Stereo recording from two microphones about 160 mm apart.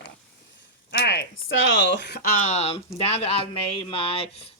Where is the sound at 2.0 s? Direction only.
90° left.